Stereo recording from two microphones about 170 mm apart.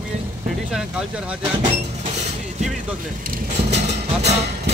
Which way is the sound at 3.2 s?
55° right (ahead or behind).